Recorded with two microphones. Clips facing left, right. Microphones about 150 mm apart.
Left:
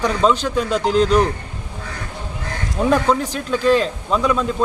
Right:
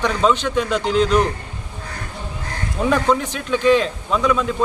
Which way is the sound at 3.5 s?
40° left (ahead or behind).